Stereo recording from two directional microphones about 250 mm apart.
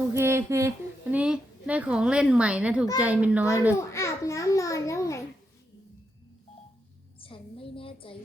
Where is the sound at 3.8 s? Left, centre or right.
Centre.